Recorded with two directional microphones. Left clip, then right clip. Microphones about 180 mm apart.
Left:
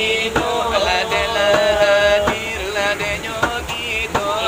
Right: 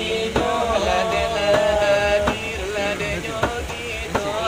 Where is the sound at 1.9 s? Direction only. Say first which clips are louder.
Left 4 dB; 15° right (ahead or behind).